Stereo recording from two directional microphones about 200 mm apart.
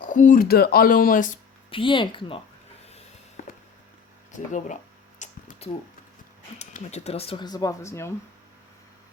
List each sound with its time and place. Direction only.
0.0 s speech: 40° left (ahead or behind)
1.7 s speech: 25° left (ahead or behind)
3.4 s walk: 40° left (ahead or behind)
4.3 s speech: 40° left (ahead or behind)
5.2 s a sound: 35° left (ahead or behind)
6.6 s speech: 35° left (ahead or behind); by 8.1 s 15° left (ahead or behind)